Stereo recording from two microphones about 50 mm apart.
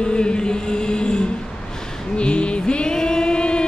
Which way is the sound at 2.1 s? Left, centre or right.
Left.